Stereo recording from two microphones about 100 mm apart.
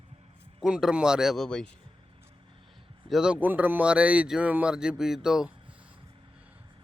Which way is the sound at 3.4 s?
20° right (ahead or behind).